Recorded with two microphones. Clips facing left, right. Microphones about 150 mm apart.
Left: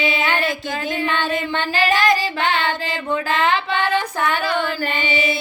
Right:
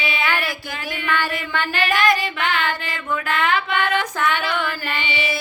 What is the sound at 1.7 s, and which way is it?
Child singing, 35° left (ahead or behind).